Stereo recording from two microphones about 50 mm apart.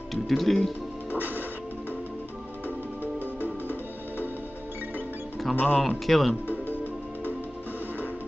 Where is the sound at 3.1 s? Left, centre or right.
Left.